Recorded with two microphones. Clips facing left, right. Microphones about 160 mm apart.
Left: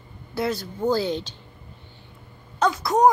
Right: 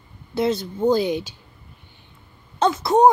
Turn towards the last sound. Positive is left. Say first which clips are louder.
# right 3 dB
turn(degrees=-25)  # may be behind; listen again after turning